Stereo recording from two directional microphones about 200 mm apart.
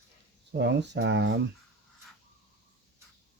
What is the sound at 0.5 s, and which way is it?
Speech, 60° right (ahead or behind).